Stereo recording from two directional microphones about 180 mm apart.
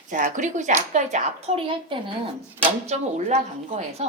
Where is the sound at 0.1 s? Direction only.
45° right (ahead or behind).